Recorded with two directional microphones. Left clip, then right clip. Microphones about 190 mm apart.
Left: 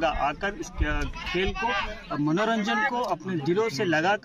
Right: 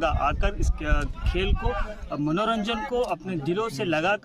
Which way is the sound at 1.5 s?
60° right (ahead or behind).